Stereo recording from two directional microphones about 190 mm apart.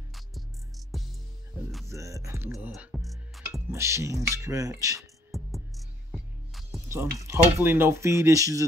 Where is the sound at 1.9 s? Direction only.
15° right (ahead or behind).